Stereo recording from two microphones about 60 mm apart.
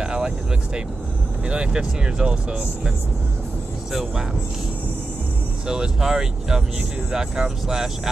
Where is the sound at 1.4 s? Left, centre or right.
Centre.